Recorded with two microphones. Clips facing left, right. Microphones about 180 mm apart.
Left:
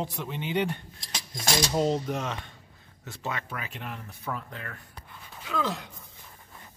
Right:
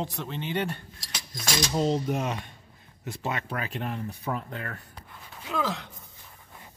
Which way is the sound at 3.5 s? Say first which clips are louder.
Right 6 dB; 40° right (ahead or behind).